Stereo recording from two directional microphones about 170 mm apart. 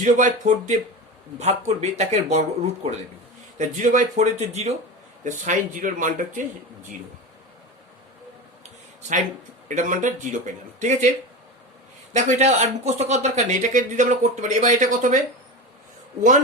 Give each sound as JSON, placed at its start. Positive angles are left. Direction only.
{"t": 0.0, "sound": "a man's voice", "side_deg": -50}
{"t": 3.6, "sound": "a man's voice", "side_deg": -50}
{"t": 9.0, "sound": "a sound", "side_deg": -45}
{"t": 9.6, "sound": "a man's voice", "side_deg": -50}
{"t": 12.1, "sound": "a man's voice", "side_deg": -45}